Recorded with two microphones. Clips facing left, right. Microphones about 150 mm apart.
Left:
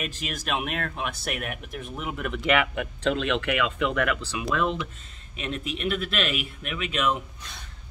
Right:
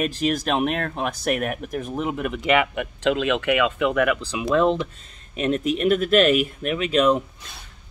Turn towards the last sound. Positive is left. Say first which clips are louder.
# right 8 dB
turn(degrees=-40)  # may be behind; listen again after turning